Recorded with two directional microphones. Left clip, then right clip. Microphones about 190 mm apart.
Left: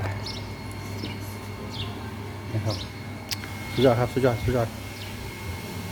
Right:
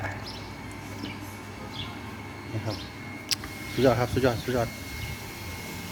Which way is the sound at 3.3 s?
5° right (ahead or behind).